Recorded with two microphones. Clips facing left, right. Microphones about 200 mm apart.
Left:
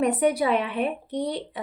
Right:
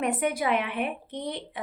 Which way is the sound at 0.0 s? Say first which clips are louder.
Left 5 dB; 35° left (ahead or behind).